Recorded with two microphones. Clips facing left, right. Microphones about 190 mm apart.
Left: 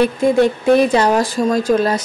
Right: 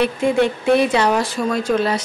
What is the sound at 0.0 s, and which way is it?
Speech, 40° left (ahead or behind).